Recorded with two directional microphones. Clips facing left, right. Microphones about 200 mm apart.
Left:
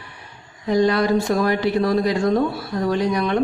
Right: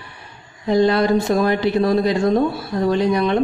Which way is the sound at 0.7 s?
25° right (ahead or behind).